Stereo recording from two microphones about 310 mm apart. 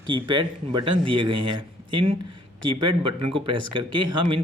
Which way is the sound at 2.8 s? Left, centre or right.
Right.